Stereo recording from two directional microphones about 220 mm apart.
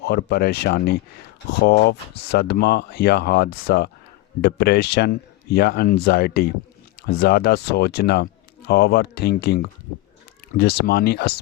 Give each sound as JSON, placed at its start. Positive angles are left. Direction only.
{"t": 0.0, "sound": "speech", "side_deg": 50}